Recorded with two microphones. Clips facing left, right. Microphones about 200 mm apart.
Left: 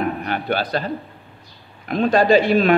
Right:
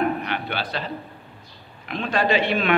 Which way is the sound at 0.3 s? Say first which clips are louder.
Left 6 dB; 45° left (ahead or behind).